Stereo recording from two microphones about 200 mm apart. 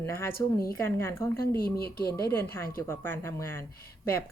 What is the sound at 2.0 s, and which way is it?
A woman's voice, 15° left (ahead or behind).